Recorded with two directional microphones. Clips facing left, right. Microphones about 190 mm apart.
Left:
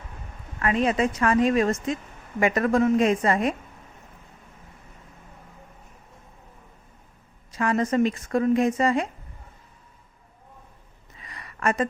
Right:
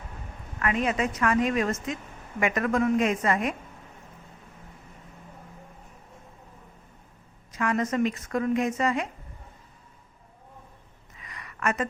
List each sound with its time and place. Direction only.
0.6 s speech: 30° left (ahead or behind)
7.5 s speech: 30° left (ahead or behind)
11.2 s a sound: 35° left (ahead or behind)